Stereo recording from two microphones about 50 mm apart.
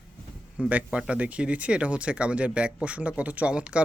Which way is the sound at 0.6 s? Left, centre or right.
Right.